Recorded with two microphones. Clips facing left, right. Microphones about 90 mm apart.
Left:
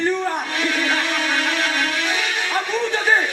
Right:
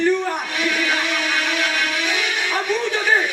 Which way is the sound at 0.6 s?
35° left (ahead or behind).